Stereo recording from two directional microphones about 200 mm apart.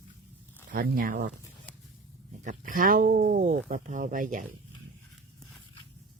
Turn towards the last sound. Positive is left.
turn(degrees=-40)  # may be behind; listen again after turning